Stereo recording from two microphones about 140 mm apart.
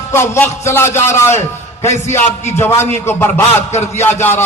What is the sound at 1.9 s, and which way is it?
Speech, 50° left (ahead or behind).